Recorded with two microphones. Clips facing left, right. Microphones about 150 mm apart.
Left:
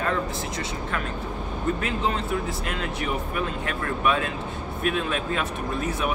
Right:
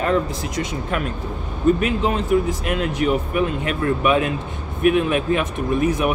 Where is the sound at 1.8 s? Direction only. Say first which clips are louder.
Right 6 dB; 20° right (ahead or behind).